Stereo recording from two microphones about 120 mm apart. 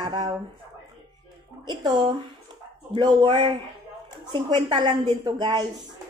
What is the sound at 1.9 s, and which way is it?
A woman's voice, 40° right (ahead or behind).